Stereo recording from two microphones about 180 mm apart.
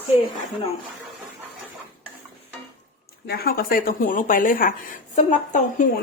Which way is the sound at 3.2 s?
60° left (ahead or behind).